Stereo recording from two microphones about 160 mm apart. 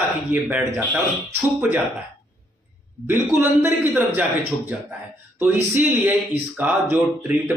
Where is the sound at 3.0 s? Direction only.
15° right (ahead or behind).